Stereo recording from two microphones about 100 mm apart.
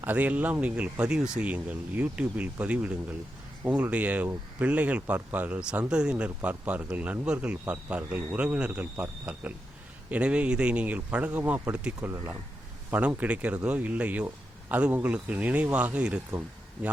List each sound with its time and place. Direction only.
0.0 s speech: 15° right (ahead or behind)
12.0 s speech: 25° right (ahead or behind)